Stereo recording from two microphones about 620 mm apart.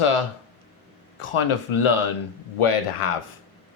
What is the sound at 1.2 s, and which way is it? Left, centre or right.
Speech, left.